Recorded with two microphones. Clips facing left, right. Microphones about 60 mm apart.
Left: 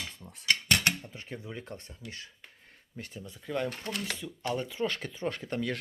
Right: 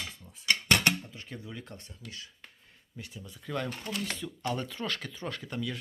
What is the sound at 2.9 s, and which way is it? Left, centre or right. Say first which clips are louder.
Speech: left 2 dB; left.